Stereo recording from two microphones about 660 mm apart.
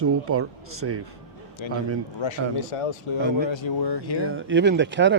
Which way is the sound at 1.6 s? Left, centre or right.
Left.